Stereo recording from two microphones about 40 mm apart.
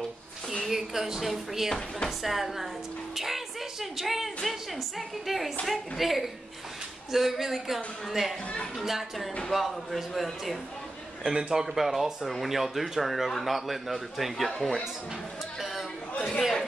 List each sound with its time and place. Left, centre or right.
0.7 s a woman's voice: centre
11.3 s a man's voice: right
11.6 s speech: centre
16.2 s speech: centre